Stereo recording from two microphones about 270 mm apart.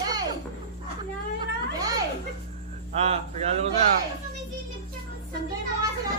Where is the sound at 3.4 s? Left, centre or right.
Right.